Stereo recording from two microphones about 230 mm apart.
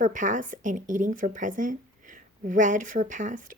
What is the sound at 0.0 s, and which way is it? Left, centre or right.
A woman's voice, right.